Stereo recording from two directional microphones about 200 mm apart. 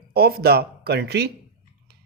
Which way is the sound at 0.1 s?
50° right (ahead or behind).